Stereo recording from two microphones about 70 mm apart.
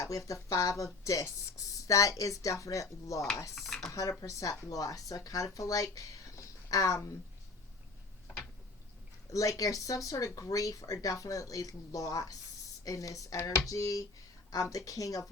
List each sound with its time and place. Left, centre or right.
0.0 s speech: left
3.5 s dishes: centre
4.2 s speech: left
9.3 s speech: left